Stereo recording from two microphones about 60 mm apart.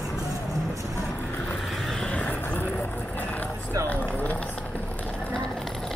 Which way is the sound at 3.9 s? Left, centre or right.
Left.